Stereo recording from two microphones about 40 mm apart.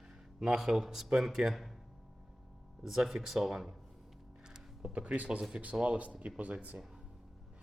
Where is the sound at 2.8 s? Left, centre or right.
Centre.